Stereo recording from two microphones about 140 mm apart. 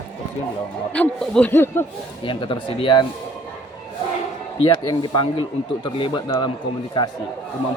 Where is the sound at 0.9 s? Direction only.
5° left (ahead or behind).